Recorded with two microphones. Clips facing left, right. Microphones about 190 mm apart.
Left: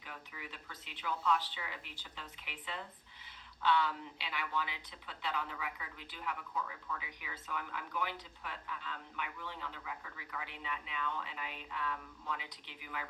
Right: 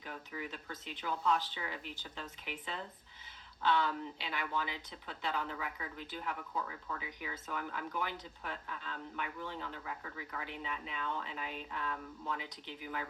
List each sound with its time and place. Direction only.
0.0 s speech: 45° right (ahead or behind)